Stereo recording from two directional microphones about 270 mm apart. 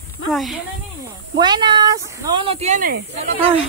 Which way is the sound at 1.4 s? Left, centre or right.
Centre.